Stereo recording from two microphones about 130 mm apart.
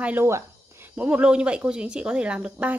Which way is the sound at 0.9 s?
10° right (ahead or behind).